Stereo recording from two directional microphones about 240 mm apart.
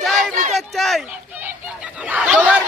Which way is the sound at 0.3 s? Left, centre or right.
Right.